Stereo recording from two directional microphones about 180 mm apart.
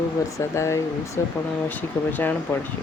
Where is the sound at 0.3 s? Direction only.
15° left (ahead or behind).